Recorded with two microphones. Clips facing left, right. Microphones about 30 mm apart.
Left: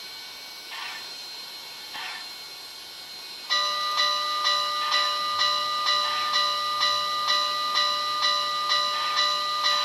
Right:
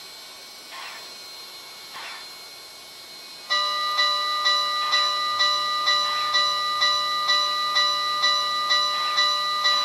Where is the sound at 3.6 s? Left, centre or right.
Centre.